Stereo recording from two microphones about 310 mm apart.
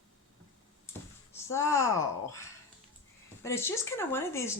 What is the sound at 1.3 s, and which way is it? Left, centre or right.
Speech, centre.